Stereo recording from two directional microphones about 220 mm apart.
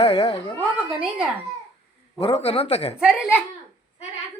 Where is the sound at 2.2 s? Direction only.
25° left (ahead or behind).